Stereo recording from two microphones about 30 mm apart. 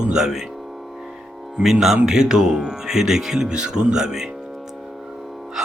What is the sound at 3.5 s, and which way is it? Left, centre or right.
Speech, right.